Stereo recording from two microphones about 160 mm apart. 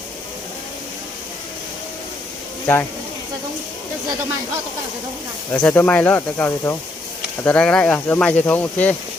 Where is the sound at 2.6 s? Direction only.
10° left (ahead or behind).